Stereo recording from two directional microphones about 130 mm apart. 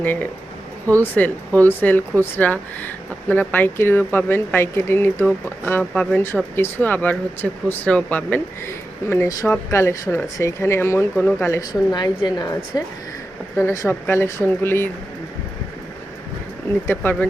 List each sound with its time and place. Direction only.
0.0 s speech: 15° left (ahead or behind)
5.8 s speech: 5° left (ahead or behind); by 11.6 s 20° left (ahead or behind)
11.7 s a woman's voice: 30° left (ahead or behind)
13.6 s speech: 20° left (ahead or behind)
16.8 s speech: 15° left (ahead or behind)